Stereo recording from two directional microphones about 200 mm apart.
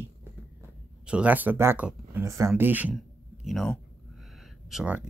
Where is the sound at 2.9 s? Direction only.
Centre (ahead or behind).